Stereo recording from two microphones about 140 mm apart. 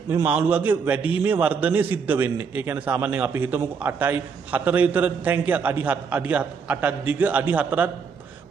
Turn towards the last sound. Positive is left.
turn(degrees=-10)  # may be behind; listen again after turning